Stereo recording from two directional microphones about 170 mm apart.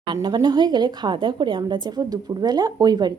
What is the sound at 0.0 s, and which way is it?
A woman's voice, 25° right (ahead or behind).